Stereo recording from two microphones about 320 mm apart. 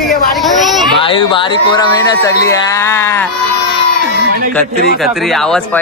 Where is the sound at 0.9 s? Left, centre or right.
Centre.